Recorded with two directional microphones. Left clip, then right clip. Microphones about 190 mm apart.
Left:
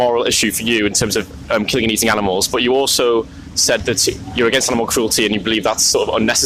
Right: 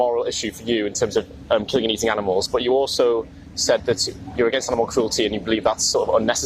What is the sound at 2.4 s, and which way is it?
Speech, 35° left (ahead or behind).